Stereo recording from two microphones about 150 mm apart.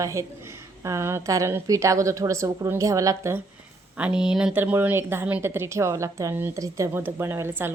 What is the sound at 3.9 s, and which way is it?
A woman's voice, 5° right (ahead or behind).